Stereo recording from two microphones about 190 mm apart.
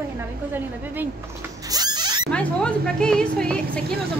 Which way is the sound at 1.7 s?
20° right (ahead or behind).